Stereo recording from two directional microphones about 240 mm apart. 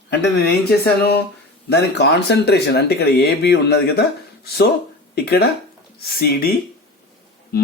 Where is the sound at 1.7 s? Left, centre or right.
Left.